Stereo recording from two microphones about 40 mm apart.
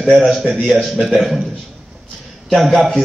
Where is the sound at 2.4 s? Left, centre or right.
Centre.